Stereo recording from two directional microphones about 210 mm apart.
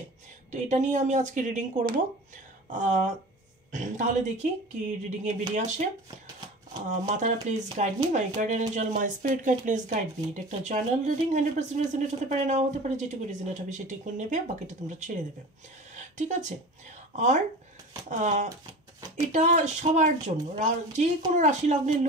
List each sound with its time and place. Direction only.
0.5 s speech: 35° right (ahead or behind)
6.9 s speech: 35° right (ahead or behind)